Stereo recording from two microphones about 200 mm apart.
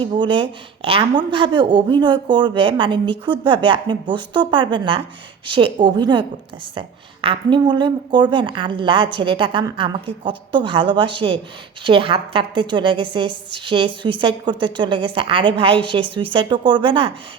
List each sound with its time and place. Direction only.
0.0 s a woman's voice: 25° right (ahead or behind)